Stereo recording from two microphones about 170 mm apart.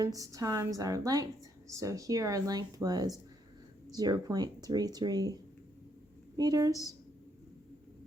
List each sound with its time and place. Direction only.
0.0 s speech: 20° right (ahead or behind)